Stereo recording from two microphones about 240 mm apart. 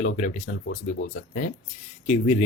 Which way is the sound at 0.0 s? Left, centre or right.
Left.